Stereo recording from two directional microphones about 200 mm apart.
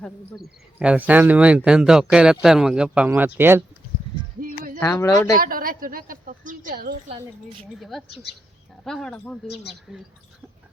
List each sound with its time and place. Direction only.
0.0 s speech: 5° right (ahead or behind)
4.4 s a sound: 45° right (ahead or behind)
4.8 s speech: 15° left (ahead or behind)
5.4 s a woman's voice: 45° right (ahead or behind)
7.8 s speech: centre (ahead or behind)
8.0 s speech: 55° left (ahead or behind)
8.8 s speech: centre (ahead or behind)